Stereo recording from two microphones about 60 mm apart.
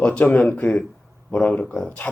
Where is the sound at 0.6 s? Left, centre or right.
Centre.